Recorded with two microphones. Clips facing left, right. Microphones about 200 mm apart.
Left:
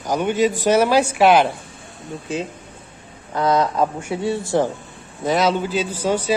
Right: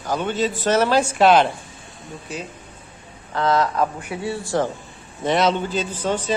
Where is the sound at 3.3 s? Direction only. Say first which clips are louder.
Left 2 dB; 20° left (ahead or behind).